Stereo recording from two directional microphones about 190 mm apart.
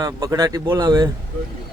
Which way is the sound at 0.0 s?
20° right (ahead or behind).